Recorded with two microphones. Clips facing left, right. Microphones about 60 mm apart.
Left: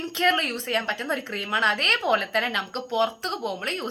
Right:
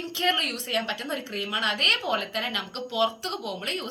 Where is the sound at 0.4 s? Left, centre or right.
Left.